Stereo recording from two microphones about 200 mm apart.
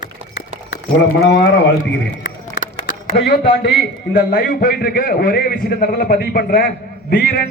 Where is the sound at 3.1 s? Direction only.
55° left (ahead or behind).